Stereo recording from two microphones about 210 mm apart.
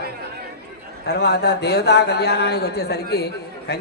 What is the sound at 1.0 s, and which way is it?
A man's voice, 50° left (ahead or behind).